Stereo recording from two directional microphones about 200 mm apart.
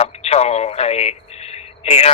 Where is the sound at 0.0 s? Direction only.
30° left (ahead or behind).